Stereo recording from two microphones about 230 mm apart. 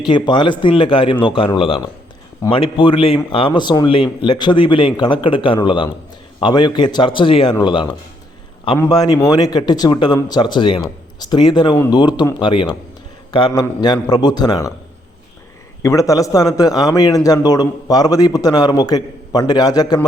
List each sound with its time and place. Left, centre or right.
0.0 s a man's voice: centre
15.8 s a man's voice: centre